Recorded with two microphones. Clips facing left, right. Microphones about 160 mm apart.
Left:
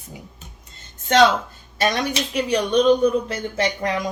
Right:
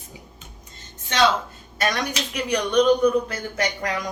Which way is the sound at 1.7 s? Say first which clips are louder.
Left 3 dB; 25° left (ahead or behind).